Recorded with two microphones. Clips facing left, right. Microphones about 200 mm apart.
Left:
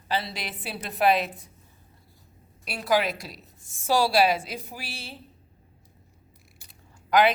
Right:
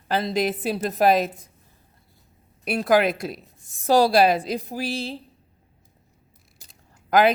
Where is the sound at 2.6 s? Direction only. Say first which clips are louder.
Right 6 dB; 55° right (ahead or behind).